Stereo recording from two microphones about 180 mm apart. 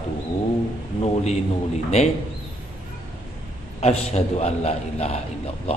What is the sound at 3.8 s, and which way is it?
A man's voice, 35° left (ahead or behind).